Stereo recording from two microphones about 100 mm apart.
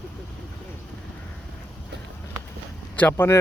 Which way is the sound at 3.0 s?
20° left (ahead or behind).